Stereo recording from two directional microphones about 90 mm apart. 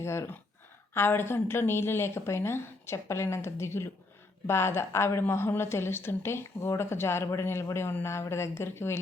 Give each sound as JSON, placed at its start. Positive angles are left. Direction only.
{"t": 0.0, "sound": "a woman's voice", "side_deg": 30}